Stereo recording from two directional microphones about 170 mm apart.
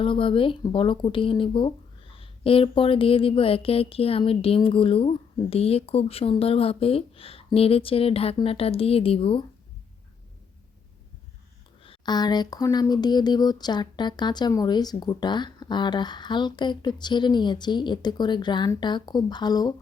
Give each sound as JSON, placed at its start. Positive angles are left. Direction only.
{"t": 0.0, "sound": "speech", "side_deg": 30}
{"t": 11.8, "sound": "speech", "side_deg": 30}